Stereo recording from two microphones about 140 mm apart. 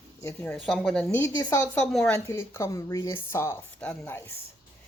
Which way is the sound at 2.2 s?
20° left (ahead or behind).